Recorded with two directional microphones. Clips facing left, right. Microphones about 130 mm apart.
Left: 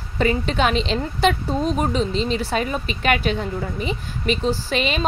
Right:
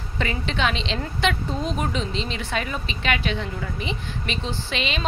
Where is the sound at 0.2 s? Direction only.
40° left (ahead or behind).